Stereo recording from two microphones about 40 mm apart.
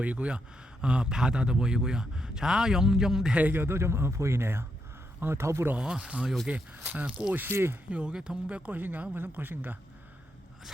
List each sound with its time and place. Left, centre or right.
0.0 s a man's voice: right; by 3.3 s centre
3.5 s speech: right
5.7 s speech: right
6.5 s speech: right
7.5 s speech: right
7.9 s speech: right
8.1 s a man's voice: centre
8.4 s speech: right
8.7 s speech: right